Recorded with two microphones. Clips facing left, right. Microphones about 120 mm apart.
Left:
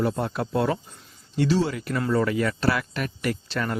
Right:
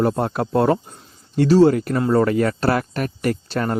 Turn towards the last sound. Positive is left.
turn(degrees=-40)  # may be behind; listen again after turning